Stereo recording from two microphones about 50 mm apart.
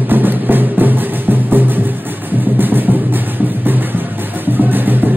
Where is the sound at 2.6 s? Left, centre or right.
Right.